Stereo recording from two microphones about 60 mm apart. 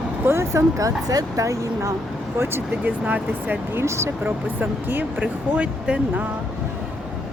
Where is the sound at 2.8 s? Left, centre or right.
Right.